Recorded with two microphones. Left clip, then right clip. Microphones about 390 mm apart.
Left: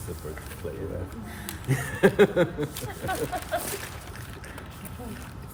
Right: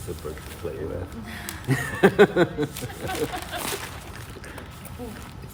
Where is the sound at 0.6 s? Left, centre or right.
Right.